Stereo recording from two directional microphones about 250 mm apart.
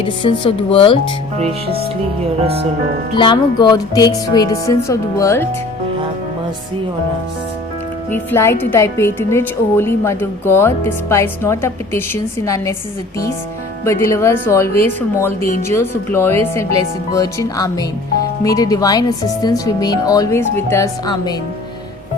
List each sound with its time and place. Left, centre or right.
0.0 s speech: centre
3.2 s a woman's voice: centre
8.1 s a woman's voice: centre
13.8 s a woman's voice: centre